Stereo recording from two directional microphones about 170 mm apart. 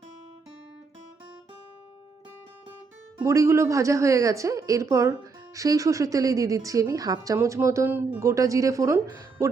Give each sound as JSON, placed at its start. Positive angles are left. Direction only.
{"t": 3.2, "sound": "a woman's voice", "side_deg": -15}